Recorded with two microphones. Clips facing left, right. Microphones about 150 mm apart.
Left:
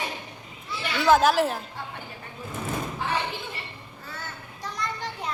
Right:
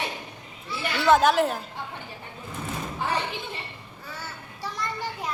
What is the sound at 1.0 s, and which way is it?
Speech, centre (ahead or behind).